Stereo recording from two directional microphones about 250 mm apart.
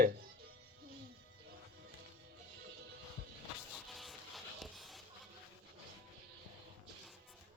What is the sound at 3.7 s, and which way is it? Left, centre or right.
Music, centre.